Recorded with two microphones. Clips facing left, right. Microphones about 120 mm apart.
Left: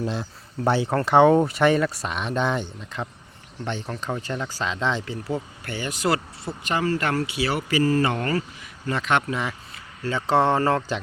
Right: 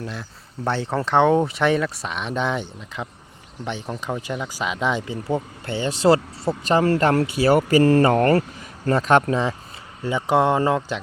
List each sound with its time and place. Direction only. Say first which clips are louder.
0.0 s speech: left 5 dB; 25° left (ahead or behind)
0.6 s speech: left 2 dB; 10° left (ahead or behind); by 6.8 s 35° right (ahead or behind)
7.1 s speech: right 7 dB; 50° right (ahead or behind)
8.0 s speech: right 8 dB; 45° right (ahead or behind)
8.9 s speech: right 6 dB; 40° right (ahead or behind)
10.0 s speech: right 2 dB; 15° right (ahead or behind)